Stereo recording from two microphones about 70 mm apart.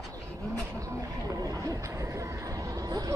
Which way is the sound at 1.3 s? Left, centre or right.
Right.